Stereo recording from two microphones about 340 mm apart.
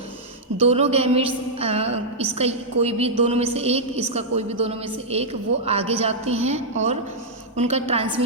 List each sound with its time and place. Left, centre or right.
0.6 s a woman's voice: centre